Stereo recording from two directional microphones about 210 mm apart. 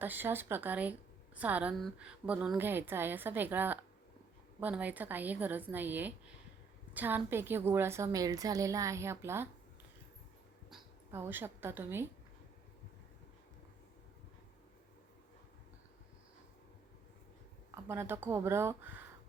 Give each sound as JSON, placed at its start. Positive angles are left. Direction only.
{"t": 0.0, "sound": "a woman's voice", "side_deg": -10}
{"t": 10.7, "sound": "speech", "side_deg": -5}
{"t": 17.7, "sound": "a woman's voice", "side_deg": -10}